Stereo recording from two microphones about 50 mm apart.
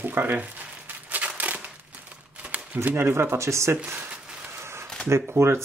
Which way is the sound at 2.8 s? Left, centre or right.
Right.